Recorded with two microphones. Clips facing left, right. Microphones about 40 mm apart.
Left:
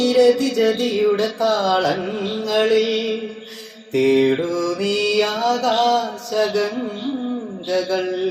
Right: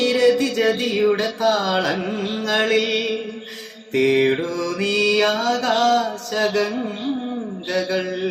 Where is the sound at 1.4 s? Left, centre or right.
Right.